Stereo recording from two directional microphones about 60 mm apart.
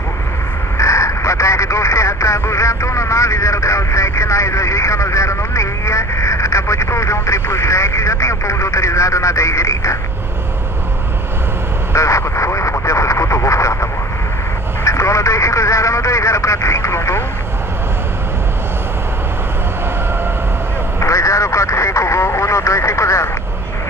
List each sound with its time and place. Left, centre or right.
0.7 s speech: left
11.9 s vehicle: left
14.9 s speech: left
21.0 s speech: left